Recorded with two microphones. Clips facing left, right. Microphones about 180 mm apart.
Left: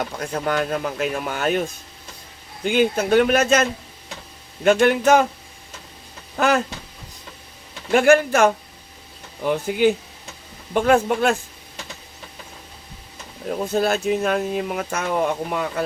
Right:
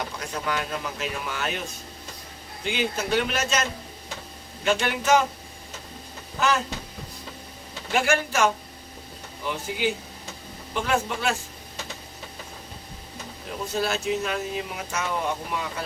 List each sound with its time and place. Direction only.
0.2 s speech: 50° left (ahead or behind)
2.6 s speech: 50° left (ahead or behind)
6.3 s speech: 55° left (ahead or behind)
7.9 s speech: 55° left (ahead or behind)
13.5 s speech: 50° left (ahead or behind)